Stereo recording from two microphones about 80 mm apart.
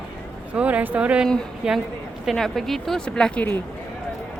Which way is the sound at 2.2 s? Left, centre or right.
Centre.